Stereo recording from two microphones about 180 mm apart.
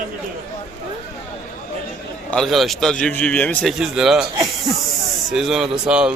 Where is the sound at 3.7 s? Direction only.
Centre (ahead or behind).